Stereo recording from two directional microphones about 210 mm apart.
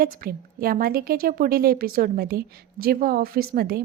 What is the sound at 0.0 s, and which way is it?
A woman's voice, 45° right (ahead or behind).